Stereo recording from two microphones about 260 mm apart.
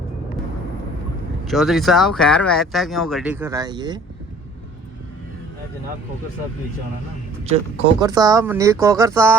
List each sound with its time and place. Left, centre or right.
1.5 s speech: centre
7.4 s speech: right
8.0 s speech: centre